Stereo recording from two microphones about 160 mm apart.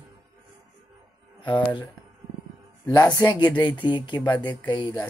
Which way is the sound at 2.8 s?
20° left (ahead or behind).